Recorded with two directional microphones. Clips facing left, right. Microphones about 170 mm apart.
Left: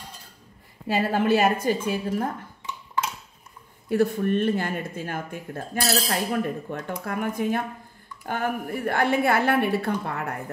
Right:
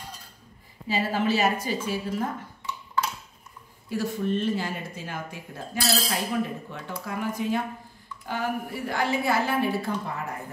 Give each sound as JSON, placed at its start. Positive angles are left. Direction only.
{"t": 0.8, "sound": "a woman's voice", "side_deg": 55}
{"t": 3.9, "sound": "a woman's voice", "side_deg": 60}